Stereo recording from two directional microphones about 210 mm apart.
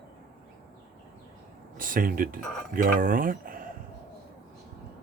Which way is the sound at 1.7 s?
40° right (ahead or behind).